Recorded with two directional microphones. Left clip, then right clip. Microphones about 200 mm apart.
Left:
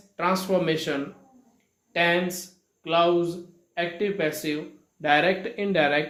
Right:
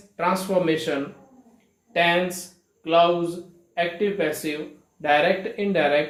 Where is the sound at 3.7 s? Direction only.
50° left (ahead or behind).